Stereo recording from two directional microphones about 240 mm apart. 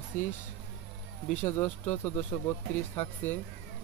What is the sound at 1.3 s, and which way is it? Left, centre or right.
Speech, centre.